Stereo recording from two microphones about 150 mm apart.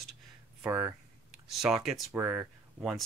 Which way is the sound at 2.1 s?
15° right (ahead or behind).